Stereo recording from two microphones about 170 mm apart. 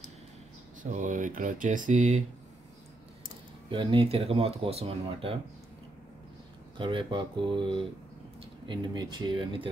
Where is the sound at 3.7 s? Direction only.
30° right (ahead or behind).